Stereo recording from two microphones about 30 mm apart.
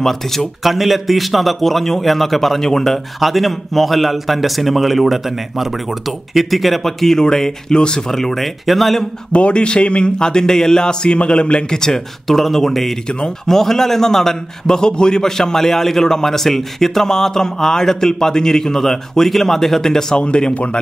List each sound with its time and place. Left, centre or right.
0.0 s a man's voice: centre
0.7 s a man's voice: centre
7.2 s speech: centre
8.1 s a man's voice: centre
8.4 s a man's voice: centre
9.3 s a man's voice: left
11.7 s a man's voice: centre
20.2 s a man's voice: left